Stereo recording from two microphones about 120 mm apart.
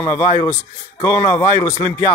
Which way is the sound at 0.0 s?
25° left (ahead or behind).